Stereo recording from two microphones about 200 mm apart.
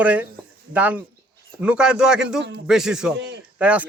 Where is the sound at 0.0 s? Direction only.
5° right (ahead or behind).